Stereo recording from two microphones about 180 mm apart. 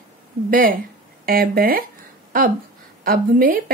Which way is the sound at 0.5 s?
50° right (ahead or behind).